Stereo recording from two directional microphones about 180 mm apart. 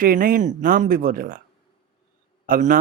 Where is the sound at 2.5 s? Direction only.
50° right (ahead or behind).